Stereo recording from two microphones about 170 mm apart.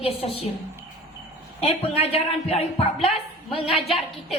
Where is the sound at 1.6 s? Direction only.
35° left (ahead or behind).